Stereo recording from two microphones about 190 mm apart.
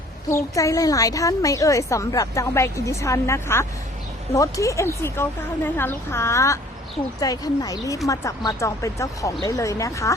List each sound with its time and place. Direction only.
0.3 s a woman's voice: 15° left (ahead or behind)